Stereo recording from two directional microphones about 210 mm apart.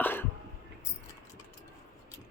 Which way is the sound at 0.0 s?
10° left (ahead or behind).